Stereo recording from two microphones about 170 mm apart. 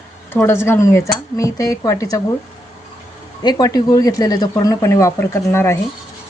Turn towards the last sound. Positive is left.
turn(degrees=15)  # may be behind; listen again after turning